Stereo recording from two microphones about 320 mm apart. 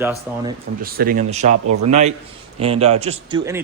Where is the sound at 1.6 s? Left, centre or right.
Right.